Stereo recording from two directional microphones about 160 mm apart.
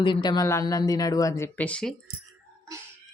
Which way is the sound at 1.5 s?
10° left (ahead or behind).